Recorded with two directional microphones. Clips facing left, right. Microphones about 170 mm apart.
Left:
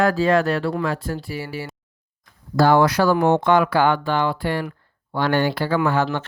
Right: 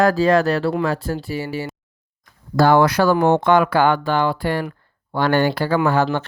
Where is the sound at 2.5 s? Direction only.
55° right (ahead or behind).